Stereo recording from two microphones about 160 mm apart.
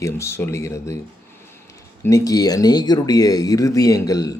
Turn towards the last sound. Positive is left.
turn(degrees=20)  # may be behind; listen again after turning